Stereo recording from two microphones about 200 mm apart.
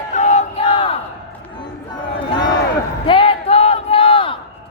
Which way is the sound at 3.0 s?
25° left (ahead or behind).